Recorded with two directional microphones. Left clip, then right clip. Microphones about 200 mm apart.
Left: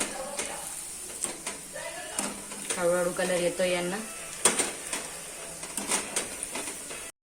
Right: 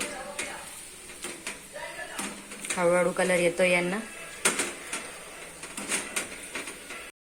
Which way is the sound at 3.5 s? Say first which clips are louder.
Right 4 dB; 25° right (ahead or behind).